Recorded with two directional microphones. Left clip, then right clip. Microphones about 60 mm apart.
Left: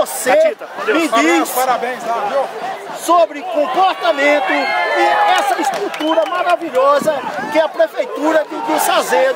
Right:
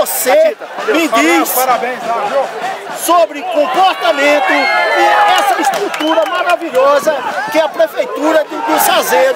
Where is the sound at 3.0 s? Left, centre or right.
Centre.